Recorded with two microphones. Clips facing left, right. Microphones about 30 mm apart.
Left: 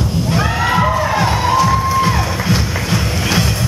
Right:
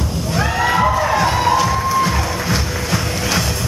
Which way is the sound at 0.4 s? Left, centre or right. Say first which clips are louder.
Right 1 dB; centre.